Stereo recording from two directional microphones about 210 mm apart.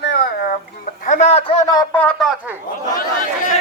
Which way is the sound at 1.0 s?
35° left (ahead or behind).